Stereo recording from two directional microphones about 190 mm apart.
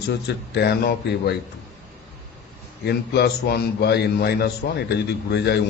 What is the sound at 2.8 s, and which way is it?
A man's voice, 60° left (ahead or behind).